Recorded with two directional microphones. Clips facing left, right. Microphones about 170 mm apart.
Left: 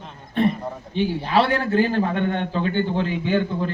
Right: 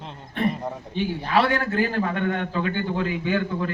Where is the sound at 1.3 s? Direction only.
30° left (ahead or behind).